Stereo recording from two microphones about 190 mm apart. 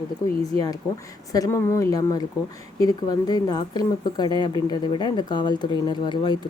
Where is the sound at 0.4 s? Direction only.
20° left (ahead or behind).